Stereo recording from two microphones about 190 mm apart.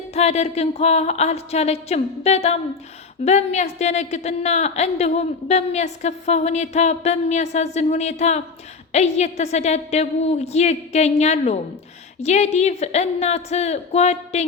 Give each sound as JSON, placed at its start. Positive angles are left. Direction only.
{"t": 0.1, "sound": "a woman's voice", "side_deg": 35}